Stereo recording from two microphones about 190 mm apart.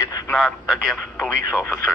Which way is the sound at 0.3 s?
Centre (ahead or behind).